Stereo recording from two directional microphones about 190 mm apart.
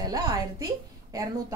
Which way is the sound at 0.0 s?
20° right (ahead or behind).